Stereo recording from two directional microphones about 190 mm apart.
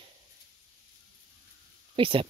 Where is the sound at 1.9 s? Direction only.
30° right (ahead or behind).